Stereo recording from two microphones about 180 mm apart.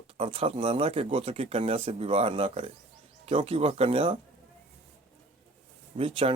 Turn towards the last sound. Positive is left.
turn(degrees=-30)  # may be behind; listen again after turning